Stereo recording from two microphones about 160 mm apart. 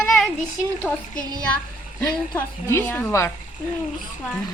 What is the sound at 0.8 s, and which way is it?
Speech, 10° left (ahead or behind).